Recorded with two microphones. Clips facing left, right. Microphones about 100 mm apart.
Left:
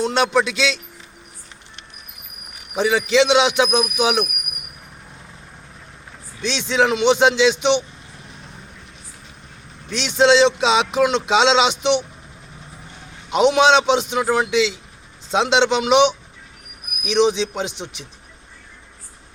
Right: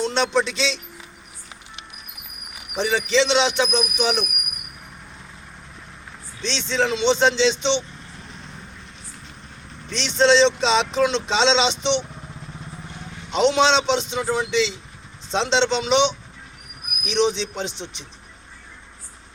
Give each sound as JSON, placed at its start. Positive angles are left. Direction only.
{"t": 0.0, "sound": "speech", "side_deg": 10}
{"t": 2.7, "sound": "speech", "side_deg": 5}
{"t": 6.4, "sound": "speech", "side_deg": 10}
{"t": 9.9, "sound": "speech", "side_deg": 10}
{"t": 13.3, "sound": "speech", "side_deg": 10}
{"t": 14.2, "sound": "speech", "side_deg": 70}
{"t": 14.5, "sound": "speech", "side_deg": 5}